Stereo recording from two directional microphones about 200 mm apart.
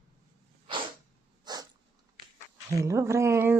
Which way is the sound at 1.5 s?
20° right (ahead or behind).